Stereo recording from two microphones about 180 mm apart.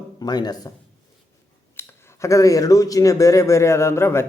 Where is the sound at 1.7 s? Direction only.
10° left (ahead or behind).